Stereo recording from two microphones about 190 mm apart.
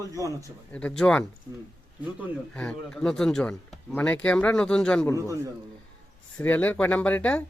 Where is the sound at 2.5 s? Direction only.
5° left (ahead or behind).